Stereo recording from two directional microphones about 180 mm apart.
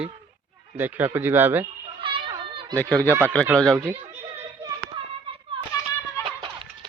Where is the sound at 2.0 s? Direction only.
30° right (ahead or behind).